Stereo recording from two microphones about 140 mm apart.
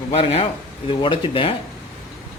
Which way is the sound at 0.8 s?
35° left (ahead or behind).